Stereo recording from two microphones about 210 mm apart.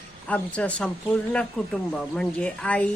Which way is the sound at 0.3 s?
5° left (ahead or behind).